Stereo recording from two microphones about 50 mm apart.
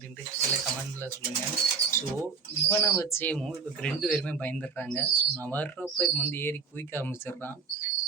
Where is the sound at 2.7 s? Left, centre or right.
Left.